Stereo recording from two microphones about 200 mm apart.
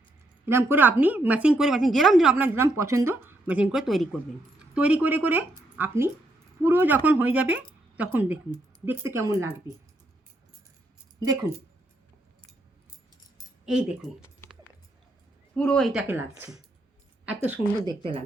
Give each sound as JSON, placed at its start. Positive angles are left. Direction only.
{"t": 0.4, "sound": "a woman's voice", "side_deg": -10}
{"t": 13.7, "sound": "a woman's voice", "side_deg": -5}
{"t": 15.5, "sound": "a woman's voice", "side_deg": 5}
{"t": 17.8, "sound": "speech", "side_deg": -25}